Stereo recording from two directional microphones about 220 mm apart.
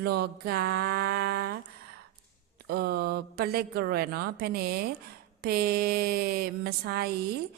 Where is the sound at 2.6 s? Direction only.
45° right (ahead or behind).